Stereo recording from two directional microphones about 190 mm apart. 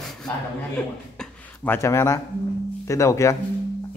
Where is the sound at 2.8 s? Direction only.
15° left (ahead or behind).